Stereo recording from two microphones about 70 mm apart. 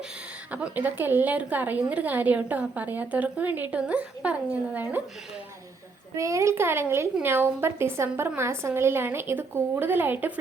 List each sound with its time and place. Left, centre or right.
0.5 s a woman's voice: right
6.1 s a woman's voice: right